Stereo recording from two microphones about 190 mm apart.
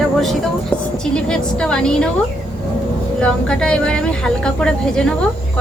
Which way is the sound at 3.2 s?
5° left (ahead or behind).